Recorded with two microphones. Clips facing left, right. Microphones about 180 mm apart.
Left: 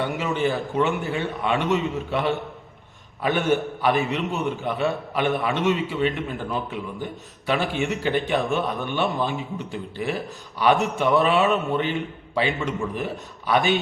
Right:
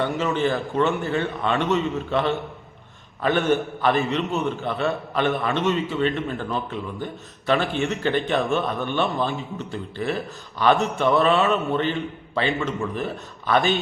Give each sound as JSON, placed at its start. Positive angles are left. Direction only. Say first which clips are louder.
{"t": 0.0, "sound": "a man's voice", "louder": "right 1 dB", "side_deg": 15}